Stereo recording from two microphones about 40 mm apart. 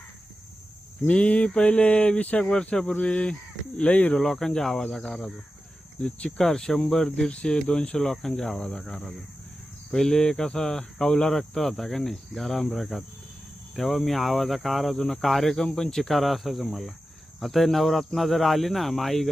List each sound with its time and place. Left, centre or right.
1.1 s speech: left
2.5 s speech: left
3.8 s speech: left
4.2 s cricket: centre
6.0 s speech: left
6.4 s cricket: centre
7.3 s speech: centre
7.9 s cricket: centre
11.3 s speech: centre
15.6 s cricket: centre
16.1 s speech: centre